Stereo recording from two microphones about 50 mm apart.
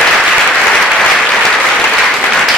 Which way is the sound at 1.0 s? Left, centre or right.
Centre.